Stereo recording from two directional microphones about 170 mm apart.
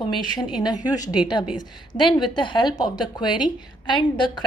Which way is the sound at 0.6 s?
25° left (ahead or behind).